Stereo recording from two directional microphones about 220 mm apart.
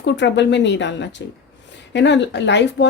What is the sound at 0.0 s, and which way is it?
Speech, 55° left (ahead or behind).